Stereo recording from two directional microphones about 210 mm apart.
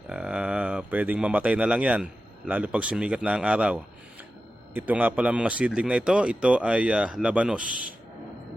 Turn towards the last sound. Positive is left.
turn(degrees=-5)  # may be behind; listen again after turning